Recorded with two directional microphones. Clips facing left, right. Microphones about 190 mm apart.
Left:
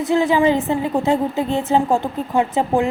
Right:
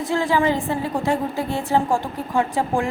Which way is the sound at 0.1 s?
20° left (ahead or behind).